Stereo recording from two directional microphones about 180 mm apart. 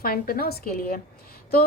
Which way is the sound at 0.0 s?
55° left (ahead or behind).